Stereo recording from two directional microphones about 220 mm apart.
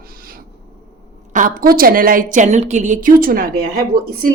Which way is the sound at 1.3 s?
40° right (ahead or behind).